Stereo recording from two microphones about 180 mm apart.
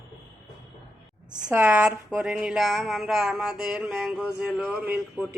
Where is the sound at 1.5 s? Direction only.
10° right (ahead or behind).